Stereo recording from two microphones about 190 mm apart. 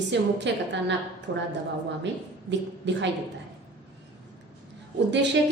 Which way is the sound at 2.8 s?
70° right (ahead or behind).